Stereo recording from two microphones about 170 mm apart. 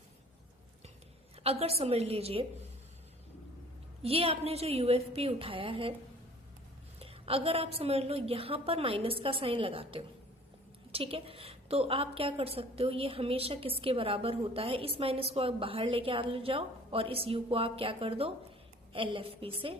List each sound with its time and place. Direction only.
1.5 s a woman's voice: 35° right (ahead or behind)
4.0 s a woman's voice: 35° right (ahead or behind)
7.0 s a woman's voice: 35° right (ahead or behind)